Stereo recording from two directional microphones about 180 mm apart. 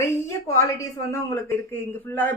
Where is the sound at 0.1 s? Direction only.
15° left (ahead or behind).